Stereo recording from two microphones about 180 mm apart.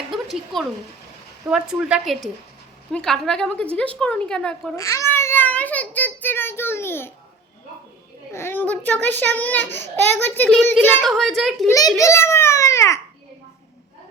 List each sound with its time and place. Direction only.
0.1 s a sound: centre (ahead or behind)
1.5 s a woman's voice: 5° right (ahead or behind)
4.8 s a child's voice: 15° left (ahead or behind)
8.3 s a child's voice: 15° left (ahead or behind)
11.7 s a child's voice: 20° left (ahead or behind)